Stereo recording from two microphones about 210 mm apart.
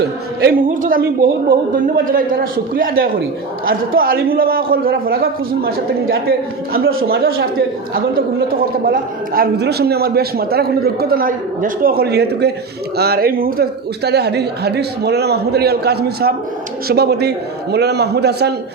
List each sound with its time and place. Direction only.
0.0 s a man's voice: 45° right (ahead or behind)
8.9 s a man's voice: 45° right (ahead or behind)